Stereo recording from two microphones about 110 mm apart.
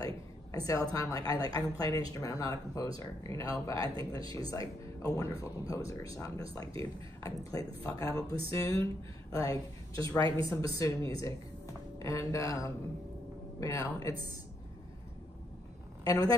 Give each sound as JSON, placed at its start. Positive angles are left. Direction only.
{"t": 0.0, "sound": "a woman's voice", "side_deg": 30}
{"t": 10.0, "sound": "a woman's voice", "side_deg": 35}
{"t": 16.1, "sound": "a woman's voice", "side_deg": 35}